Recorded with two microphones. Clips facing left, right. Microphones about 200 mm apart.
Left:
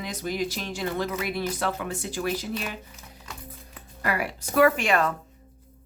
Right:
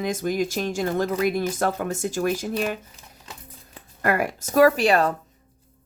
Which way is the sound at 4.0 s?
45° right (ahead or behind).